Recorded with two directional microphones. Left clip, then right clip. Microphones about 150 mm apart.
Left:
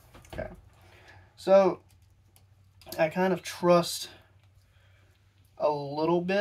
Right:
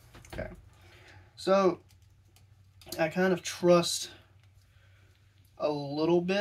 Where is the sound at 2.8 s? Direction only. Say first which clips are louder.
Left 2 dB; 10° right (ahead or behind).